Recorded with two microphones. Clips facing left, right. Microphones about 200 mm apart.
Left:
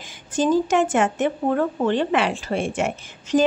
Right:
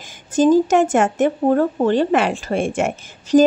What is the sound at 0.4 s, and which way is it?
A woman's voice, 45° right (ahead or behind).